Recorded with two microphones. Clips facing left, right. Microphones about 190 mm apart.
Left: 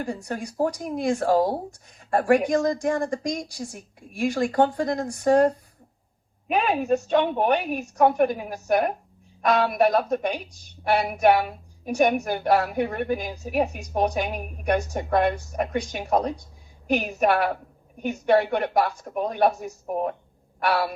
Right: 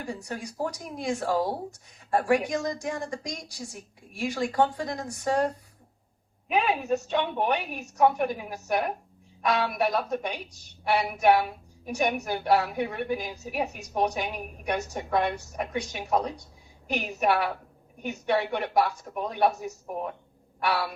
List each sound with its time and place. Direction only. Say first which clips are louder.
0.0 s a woman's voice: left 5 dB; 50° left (ahead or behind)
6.5 s a woman's voice: left 3 dB; 60° left (ahead or behind)
20.6 s a woman's voice: left 4 dB; 50° left (ahead or behind)